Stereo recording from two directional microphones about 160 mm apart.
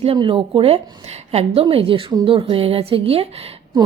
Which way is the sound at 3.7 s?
30° right (ahead or behind).